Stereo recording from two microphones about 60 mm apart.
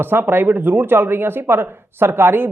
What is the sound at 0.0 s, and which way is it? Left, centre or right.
Speech, right.